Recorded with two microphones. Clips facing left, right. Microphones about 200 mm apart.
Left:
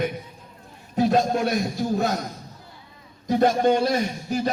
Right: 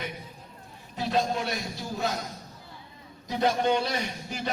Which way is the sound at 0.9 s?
50° left (ahead or behind).